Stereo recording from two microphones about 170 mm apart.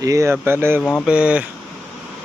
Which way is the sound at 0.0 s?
20° right (ahead or behind).